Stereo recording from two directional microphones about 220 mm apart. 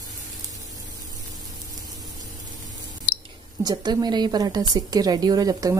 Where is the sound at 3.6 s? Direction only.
20° right (ahead or behind).